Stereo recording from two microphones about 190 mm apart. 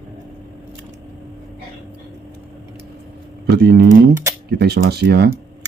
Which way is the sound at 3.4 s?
60° right (ahead or behind).